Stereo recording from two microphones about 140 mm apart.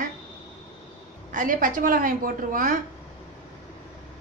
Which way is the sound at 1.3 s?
75° right (ahead or behind).